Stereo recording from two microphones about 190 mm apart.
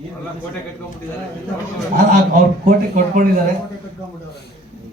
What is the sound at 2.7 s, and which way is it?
Speech, 45° right (ahead or behind).